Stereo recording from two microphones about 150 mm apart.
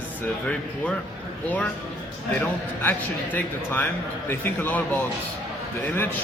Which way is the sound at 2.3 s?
10° left (ahead or behind).